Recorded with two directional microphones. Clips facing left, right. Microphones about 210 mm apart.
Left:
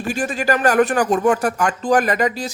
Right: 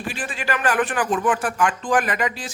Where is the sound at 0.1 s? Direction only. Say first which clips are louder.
Left 8 dB; 45° left (ahead or behind).